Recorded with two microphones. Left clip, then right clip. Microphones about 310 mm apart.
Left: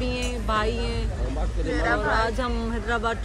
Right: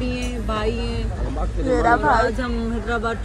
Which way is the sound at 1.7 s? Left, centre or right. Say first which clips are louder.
Right 7 dB; centre.